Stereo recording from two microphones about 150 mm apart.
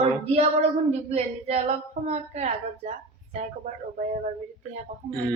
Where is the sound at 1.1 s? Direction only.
45° right (ahead or behind).